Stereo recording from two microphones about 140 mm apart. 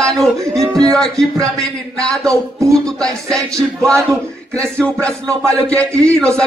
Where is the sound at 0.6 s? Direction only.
25° right (ahead or behind).